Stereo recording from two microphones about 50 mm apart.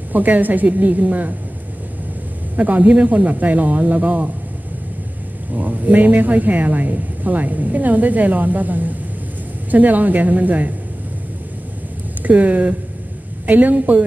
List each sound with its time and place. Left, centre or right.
0.1 s speech: right
2.5 s speech: right
5.5 s speech: right
12.2 s speech: right